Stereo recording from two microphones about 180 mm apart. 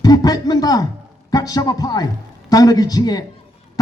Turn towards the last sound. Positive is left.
turn(degrees=20)  # may be behind; listen again after turning